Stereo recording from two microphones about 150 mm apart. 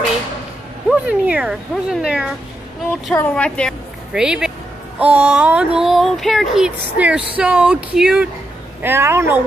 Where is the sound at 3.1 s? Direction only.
10° left (ahead or behind).